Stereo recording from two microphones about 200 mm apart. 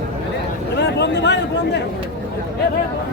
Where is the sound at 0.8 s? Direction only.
60° left (ahead or behind).